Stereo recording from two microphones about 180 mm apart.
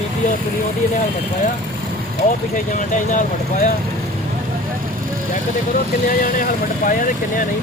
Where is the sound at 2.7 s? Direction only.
45° left (ahead or behind).